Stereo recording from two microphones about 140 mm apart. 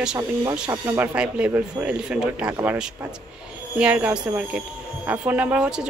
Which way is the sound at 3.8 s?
10° right (ahead or behind).